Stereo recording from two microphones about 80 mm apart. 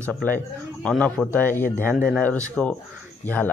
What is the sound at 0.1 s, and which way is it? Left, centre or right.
A man's voice, left.